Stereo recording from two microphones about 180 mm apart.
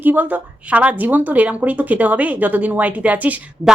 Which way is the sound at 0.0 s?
10° right (ahead or behind).